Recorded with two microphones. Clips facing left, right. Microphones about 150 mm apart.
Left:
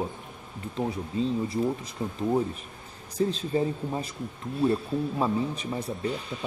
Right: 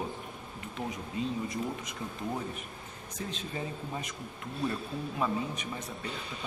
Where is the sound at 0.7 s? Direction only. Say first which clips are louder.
Left 7 dB; 30° left (ahead or behind).